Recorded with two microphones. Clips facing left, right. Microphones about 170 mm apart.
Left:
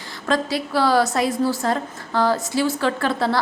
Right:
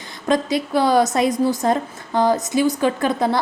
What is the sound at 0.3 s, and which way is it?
A woman's voice, 20° right (ahead or behind).